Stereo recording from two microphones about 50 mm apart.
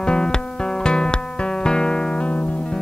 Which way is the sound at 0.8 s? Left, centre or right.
Centre.